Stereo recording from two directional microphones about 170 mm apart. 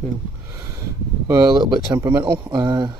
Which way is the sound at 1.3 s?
25° right (ahead or behind).